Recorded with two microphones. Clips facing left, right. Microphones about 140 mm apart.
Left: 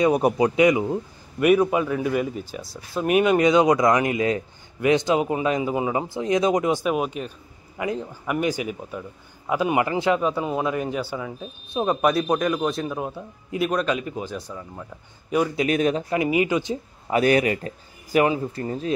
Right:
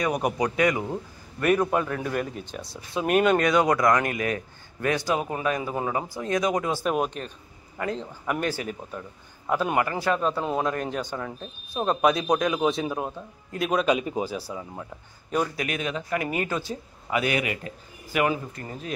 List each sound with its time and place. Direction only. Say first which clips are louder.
0.0 s speech: left 6 dB; 25° left (ahead or behind)
0.6 s a man's voice: left 6 dB; 15° left (ahead or behind)
3.4 s speech: left 4 dB; 20° left (ahead or behind)
6.9 s a man's voice: left 2 dB; 5° left (ahead or behind)
9.8 s speech: left 3 dB; 20° left (ahead or behind)
10.2 s a man's voice: left 2 dB; 5° left (ahead or behind)
13.1 s a man's voice: left 5 dB; 10° left (ahead or behind)
13.8 s speech: right 2 dB; 20° right (ahead or behind)
15.5 s speech: left 8 dB; 30° left (ahead or behind)
15.8 s a man's voice: left 9 dB; 40° left (ahead or behind)
16.3 s a man's voice: left 7 dB; 10° left (ahead or behind)
17.1 s a man's voice: left 7 dB; 40° left (ahead or behind)